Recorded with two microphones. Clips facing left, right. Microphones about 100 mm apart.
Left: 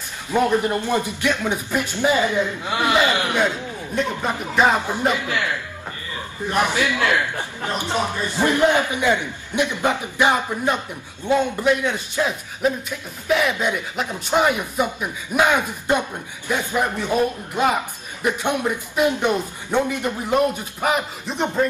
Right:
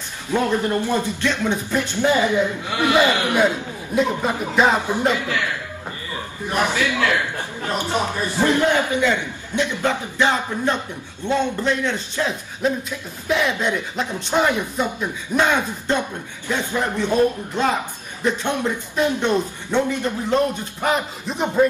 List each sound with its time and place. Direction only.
0.3 s a man's voice: 15° left (ahead or behind)
3.9 s speech: centre (ahead or behind)
5.0 s speech: 20° left (ahead or behind)
6.6 s a man's voice: 20° left (ahead or behind); by 21.6 s centre (ahead or behind)